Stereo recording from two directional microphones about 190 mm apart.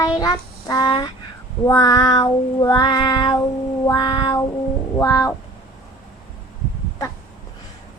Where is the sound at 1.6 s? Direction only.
20° left (ahead or behind).